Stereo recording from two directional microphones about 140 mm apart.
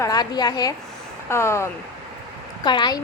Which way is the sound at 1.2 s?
20° left (ahead or behind).